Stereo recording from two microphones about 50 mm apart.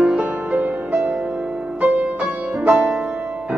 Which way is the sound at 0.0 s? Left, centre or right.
Right.